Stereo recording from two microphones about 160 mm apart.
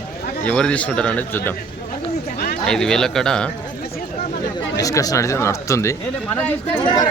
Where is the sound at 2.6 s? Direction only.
5° left (ahead or behind).